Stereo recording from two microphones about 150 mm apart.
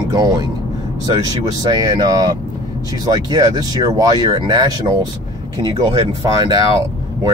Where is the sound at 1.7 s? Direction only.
25° right (ahead or behind).